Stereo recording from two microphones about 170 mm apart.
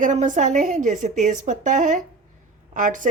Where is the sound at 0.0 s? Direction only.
50° right (ahead or behind).